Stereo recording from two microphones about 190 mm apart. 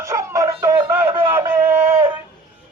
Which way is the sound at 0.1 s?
15° right (ahead or behind).